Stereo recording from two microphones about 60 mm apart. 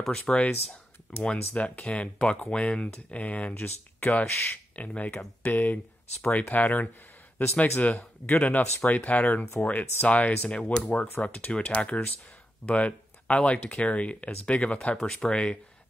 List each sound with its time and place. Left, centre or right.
0.1 s speech: centre
3.5 s speech: left
10.5 s speech: centre
10.8 s speech: left